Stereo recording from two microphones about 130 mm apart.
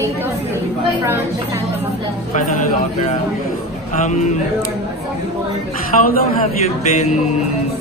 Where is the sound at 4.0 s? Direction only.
70° left (ahead or behind).